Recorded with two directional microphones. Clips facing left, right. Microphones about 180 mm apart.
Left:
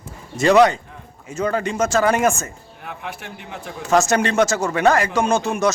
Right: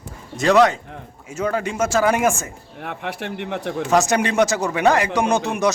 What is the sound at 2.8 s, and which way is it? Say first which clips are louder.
Speech: right 5 dB; 65° right (ahead or behind).